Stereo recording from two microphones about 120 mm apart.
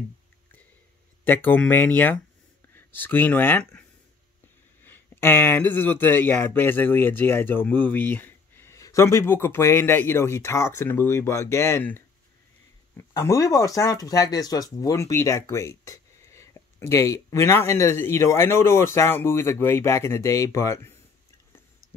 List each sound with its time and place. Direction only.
1.2 s speech: 15° left (ahead or behind)
4.8 s speech: 15° left (ahead or behind)